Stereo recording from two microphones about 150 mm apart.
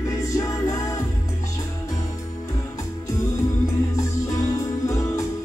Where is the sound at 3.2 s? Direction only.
25° left (ahead or behind).